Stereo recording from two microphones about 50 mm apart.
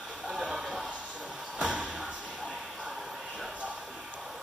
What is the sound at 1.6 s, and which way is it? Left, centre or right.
Slam, right.